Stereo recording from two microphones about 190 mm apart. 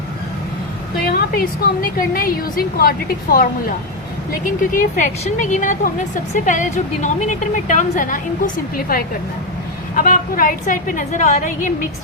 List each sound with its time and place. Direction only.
0.9 s a sound: 55° left (ahead or behind)
2.1 s a woman's voice: 50° left (ahead or behind)
4.6 s a woman's voice: 45° left (ahead or behind)